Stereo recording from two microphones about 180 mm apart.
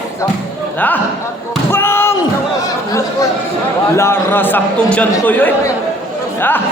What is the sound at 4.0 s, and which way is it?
A man's voice, 10° left (ahead or behind).